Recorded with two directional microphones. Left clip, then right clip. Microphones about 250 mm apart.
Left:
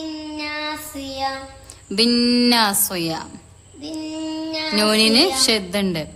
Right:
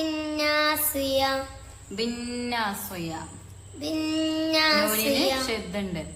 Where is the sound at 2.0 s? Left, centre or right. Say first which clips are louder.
Left 14 dB; left.